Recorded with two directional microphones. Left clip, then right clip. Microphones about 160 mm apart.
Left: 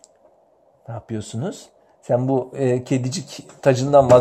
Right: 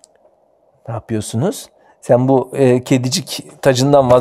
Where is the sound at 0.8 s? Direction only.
50° right (ahead or behind).